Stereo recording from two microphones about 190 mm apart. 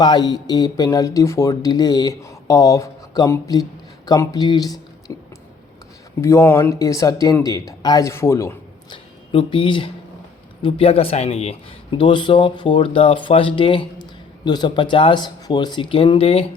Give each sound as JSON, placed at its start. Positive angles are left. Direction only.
{"t": 0.0, "sound": "a man's voice", "side_deg": 20}
{"t": 6.2, "sound": "speech", "side_deg": 15}
{"t": 8.9, "sound": "a man's voice", "side_deg": 30}